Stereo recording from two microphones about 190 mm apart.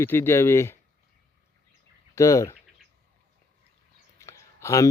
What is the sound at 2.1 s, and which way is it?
Speech, 15° left (ahead or behind).